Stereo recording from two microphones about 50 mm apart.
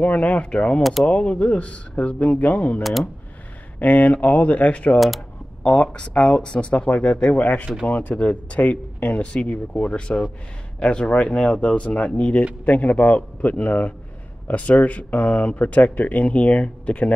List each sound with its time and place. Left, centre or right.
0.0 s speech: left
2.8 s speech: centre
3.8 s a man's voice: left